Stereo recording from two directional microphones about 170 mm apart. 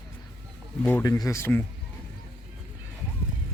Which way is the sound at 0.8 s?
15° left (ahead or behind).